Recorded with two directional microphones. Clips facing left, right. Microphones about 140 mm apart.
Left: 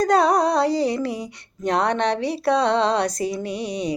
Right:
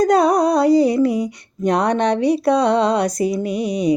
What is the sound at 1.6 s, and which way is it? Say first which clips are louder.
Speech: right 4 dB; 15° right (ahead or behind).